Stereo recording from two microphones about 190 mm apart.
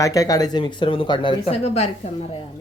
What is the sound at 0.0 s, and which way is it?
Speech, 20° left (ahead or behind).